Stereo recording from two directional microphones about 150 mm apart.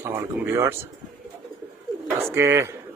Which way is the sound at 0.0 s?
20° right (ahead or behind).